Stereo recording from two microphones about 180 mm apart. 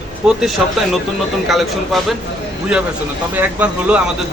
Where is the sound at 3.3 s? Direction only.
10° right (ahead or behind).